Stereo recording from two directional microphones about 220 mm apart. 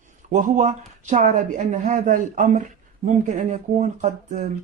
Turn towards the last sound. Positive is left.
turn(degrees=-35)  # may be behind; listen again after turning